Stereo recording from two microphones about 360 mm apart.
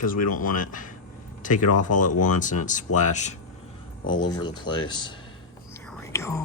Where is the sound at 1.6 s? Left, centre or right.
Left.